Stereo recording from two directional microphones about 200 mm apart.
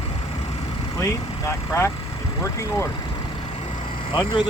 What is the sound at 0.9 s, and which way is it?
Speech, 15° left (ahead or behind).